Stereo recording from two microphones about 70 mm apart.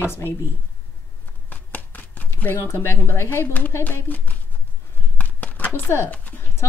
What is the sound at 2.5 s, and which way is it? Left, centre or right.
A woman's voice, left.